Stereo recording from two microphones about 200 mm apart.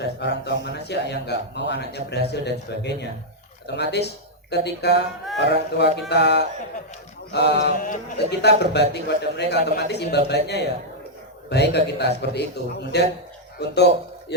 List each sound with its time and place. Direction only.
0.0 s a man's voice: 60° left (ahead or behind)
7.8 s a man's voice: 40° left (ahead or behind)
8.4 s a man's voice: 55° left (ahead or behind)